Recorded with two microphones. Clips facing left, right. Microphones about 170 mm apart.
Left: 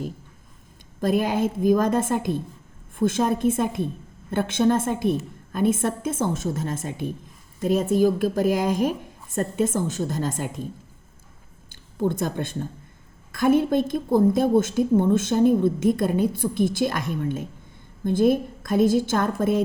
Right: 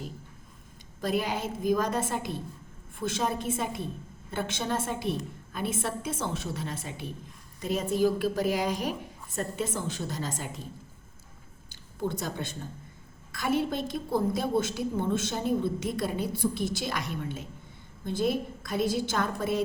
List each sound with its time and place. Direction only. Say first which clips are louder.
1.0 s a woman's voice: left 8 dB; 50° left (ahead or behind)
11.7 s a woman's voice: left 7 dB; 50° left (ahead or behind)